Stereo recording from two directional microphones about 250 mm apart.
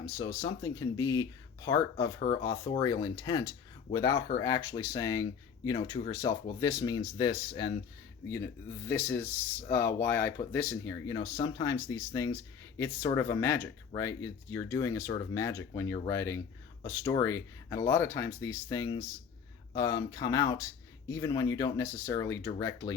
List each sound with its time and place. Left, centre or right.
0.0 s speech: centre
8.9 s speech: centre